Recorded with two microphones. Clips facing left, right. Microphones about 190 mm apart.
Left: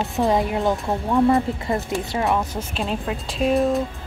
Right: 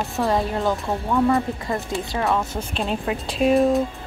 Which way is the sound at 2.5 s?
Centre (ahead or behind).